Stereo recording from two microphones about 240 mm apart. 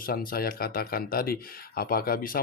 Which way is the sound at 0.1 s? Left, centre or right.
Left.